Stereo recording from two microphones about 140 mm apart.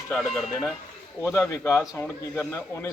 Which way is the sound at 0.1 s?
Centre (ahead or behind).